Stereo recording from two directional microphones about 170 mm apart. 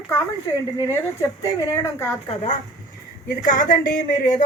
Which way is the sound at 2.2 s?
40° left (ahead or behind).